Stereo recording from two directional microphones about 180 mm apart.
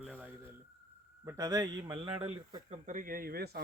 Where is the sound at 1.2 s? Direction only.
20° right (ahead or behind).